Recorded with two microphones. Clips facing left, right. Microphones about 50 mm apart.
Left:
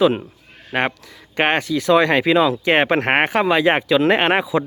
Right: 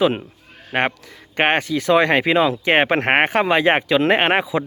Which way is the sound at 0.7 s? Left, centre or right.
Right.